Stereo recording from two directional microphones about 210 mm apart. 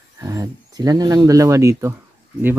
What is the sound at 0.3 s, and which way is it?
Speech, 15° right (ahead or behind).